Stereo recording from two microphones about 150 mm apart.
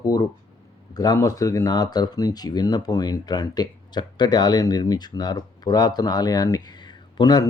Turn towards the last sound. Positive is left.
turn(degrees=25)  # may be behind; listen again after turning